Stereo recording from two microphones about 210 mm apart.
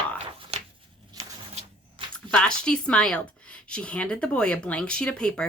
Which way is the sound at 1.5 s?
30° right (ahead or behind).